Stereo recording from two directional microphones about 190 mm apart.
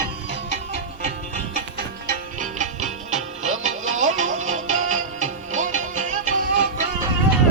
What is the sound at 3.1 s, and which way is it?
Music, 35° right (ahead or behind).